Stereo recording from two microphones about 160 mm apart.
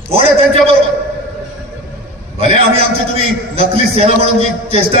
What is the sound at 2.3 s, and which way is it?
A man's voice, 35° right (ahead or behind).